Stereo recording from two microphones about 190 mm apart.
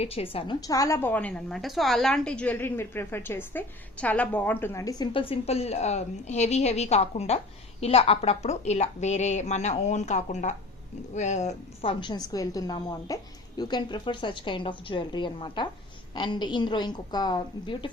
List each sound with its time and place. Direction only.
0.0 s a woman's voice: 30° left (ahead or behind)